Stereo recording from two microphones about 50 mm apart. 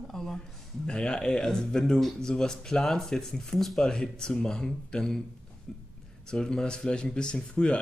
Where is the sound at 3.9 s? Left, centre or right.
Centre.